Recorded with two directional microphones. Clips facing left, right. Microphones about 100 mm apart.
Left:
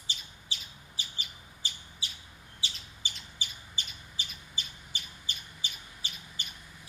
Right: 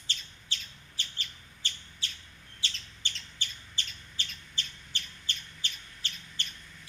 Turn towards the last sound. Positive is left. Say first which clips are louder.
# right 1 dB
turn(degrees=10)  # may be behind; listen again after turning